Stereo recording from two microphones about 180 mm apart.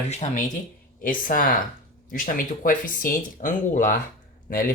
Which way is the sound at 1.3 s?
50° left (ahead or behind).